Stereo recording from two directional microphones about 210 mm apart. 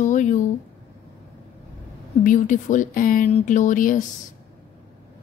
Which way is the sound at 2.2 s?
35° left (ahead or behind).